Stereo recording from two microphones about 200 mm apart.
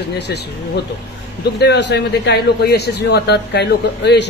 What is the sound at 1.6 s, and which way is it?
A man's voice, 60° left (ahead or behind).